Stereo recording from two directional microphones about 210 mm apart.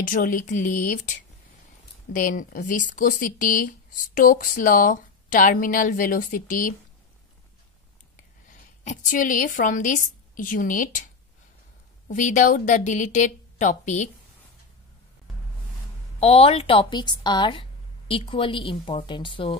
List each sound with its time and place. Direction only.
0.0 s speech: 40° left (ahead or behind)
2.1 s speech: 40° left (ahead or behind)
8.5 s a woman's voice: 40° left (ahead or behind)
12.1 s speech: 35° left (ahead or behind)
16.2 s a woman's voice: 30° left (ahead or behind)